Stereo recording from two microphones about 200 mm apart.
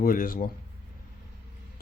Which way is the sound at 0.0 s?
45° left (ahead or behind).